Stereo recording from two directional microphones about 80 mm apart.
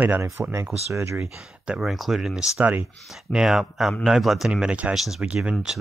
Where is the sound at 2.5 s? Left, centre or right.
Right.